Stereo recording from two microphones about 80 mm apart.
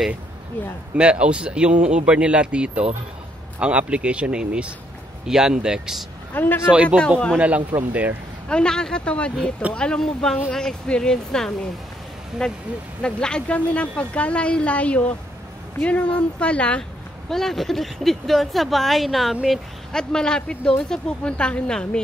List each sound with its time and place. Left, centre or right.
0.9 s speech: centre
6.3 s speech: left
6.7 s speech: centre
8.5 s speech: centre
17.3 s speech: centre